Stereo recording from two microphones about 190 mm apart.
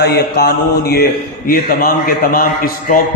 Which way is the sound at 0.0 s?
55° left (ahead or behind).